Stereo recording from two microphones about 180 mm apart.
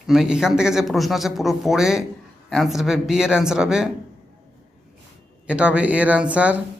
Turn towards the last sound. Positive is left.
turn(degrees=-5)  # may be behind; listen again after turning